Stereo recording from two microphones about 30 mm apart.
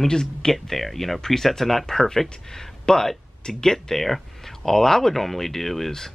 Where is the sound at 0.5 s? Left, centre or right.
Centre.